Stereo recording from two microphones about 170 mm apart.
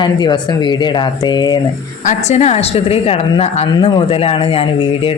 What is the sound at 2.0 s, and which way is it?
Speech, 40° left (ahead or behind).